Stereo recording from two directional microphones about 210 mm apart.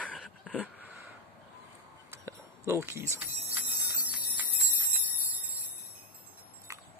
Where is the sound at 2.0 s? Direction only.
15° right (ahead or behind).